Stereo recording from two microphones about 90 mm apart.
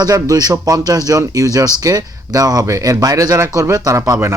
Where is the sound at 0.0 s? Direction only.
45° right (ahead or behind).